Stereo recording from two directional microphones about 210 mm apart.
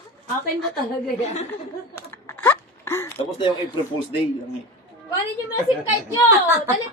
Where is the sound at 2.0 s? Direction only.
10° left (ahead or behind).